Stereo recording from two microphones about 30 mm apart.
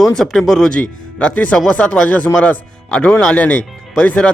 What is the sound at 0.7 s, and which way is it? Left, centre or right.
Speech, left.